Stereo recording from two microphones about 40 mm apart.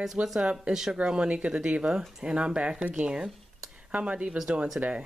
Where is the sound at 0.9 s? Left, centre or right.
Right.